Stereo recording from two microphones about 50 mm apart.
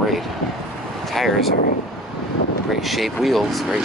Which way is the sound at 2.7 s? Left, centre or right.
Centre.